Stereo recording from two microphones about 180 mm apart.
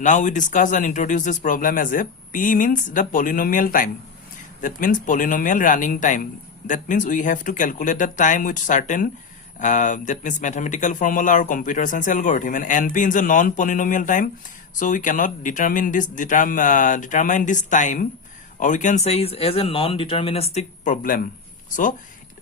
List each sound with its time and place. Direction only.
0.0 s speech: 45° left (ahead or behind)